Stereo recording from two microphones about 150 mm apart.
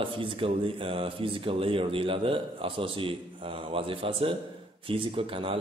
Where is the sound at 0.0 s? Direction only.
35° right (ahead or behind).